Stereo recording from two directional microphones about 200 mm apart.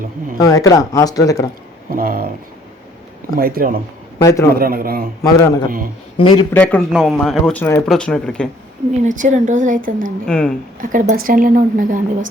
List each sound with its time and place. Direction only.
0.3 s speech: 15° left (ahead or behind)
1.9 s speech: 45° right (ahead or behind)
3.3 s speech: 45° right (ahead or behind)
4.2 s speech: 15° left (ahead or behind)
4.5 s speech: 45° right (ahead or behind)
5.2 s speech: 20° left (ahead or behind)
5.6 s speech: 45° right (ahead or behind)
6.1 s speech: 25° left (ahead or behind)
6.5 s a man's voice: 5° left (ahead or behind)
9.0 s speech: 40° right (ahead or behind)
10.2 s a man's voice: 5° left (ahead or behind)
10.8 s speech: 40° right (ahead or behind)